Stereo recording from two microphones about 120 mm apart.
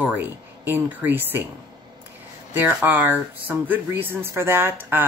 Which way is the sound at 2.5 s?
15° right (ahead or behind).